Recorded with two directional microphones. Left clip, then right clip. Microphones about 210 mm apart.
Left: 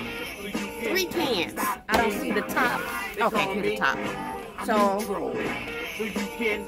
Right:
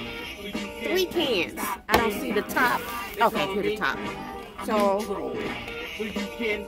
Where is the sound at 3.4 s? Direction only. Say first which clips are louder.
Left 1 dB; 20° left (ahead or behind).